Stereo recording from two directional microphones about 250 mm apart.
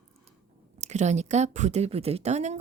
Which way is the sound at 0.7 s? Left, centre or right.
Right.